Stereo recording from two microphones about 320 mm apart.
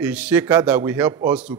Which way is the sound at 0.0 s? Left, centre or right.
Centre.